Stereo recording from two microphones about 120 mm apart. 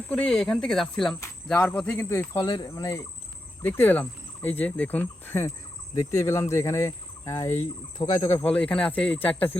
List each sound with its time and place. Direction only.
0.1 s speech: 5° left (ahead or behind); by 2.5 s 20° left (ahead or behind)
2.5 s speech: 30° left (ahead or behind)
8.4 s speech: 10° left (ahead or behind)